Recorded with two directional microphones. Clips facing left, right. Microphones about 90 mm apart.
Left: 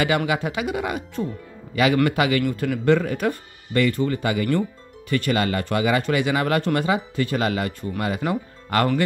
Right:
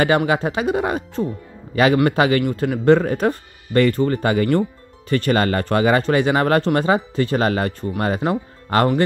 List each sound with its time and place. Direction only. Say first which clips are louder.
0.3 s speech: right 5 dB; 35° right (ahead or behind)